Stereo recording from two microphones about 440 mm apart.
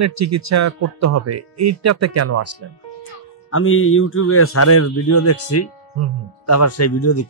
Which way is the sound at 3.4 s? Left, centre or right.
Left.